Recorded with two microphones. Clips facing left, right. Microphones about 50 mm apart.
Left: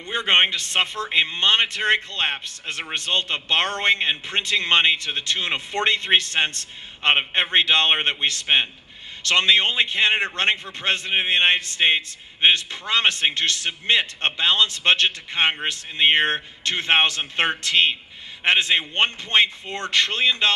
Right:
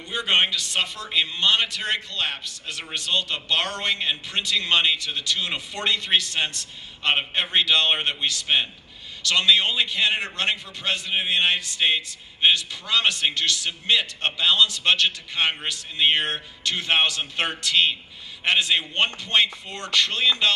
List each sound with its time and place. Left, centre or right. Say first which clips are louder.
0.1 s a man's voice: left 3 dB; left